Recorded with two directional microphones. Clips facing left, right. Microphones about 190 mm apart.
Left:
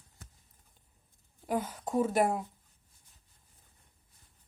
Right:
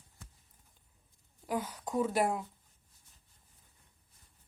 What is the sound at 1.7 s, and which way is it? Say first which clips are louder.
Speech: left 3 dB; 25° left (ahead or behind).